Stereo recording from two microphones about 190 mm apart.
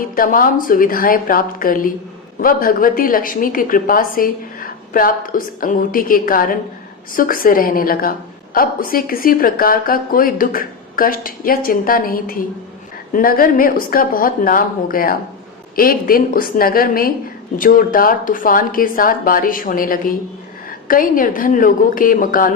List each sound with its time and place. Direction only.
0.0 s a woman's voice: 45° left (ahead or behind)